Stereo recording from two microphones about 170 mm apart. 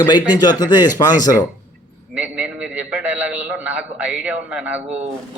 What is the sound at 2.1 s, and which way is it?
A man's voice, 5° right (ahead or behind).